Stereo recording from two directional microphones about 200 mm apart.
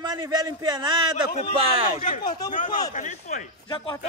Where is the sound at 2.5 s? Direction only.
40° left (ahead or behind).